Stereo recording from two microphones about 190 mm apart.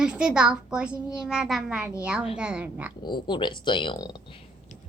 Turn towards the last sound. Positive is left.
turn(degrees=20)  # may be behind; listen again after turning